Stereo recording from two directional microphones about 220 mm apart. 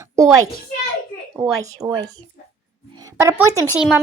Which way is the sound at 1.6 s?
20° right (ahead or behind).